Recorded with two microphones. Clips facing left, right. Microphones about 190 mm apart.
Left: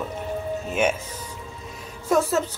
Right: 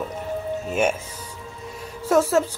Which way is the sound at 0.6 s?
5° right (ahead or behind).